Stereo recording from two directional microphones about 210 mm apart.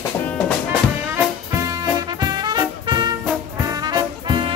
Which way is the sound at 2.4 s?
20° right (ahead or behind).